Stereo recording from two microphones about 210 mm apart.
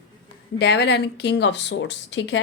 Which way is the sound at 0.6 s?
55° left (ahead or behind).